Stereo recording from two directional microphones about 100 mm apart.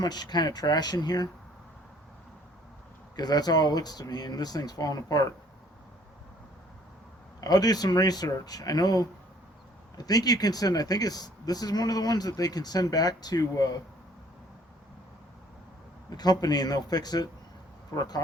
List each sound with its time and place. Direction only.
0.0 s speech: 45° left (ahead or behind)
3.2 s speech: 40° left (ahead or behind)
7.4 s speech: 40° left (ahead or behind)
16.0 s speech: 40° left (ahead or behind)